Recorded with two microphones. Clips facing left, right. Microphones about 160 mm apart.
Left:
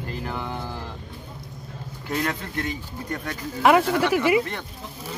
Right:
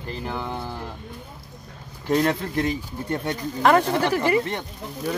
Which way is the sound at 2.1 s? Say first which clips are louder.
Right 6 dB; 30° right (ahead or behind).